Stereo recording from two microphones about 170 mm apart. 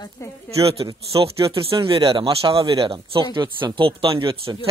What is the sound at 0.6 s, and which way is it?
Speech, 35° right (ahead or behind).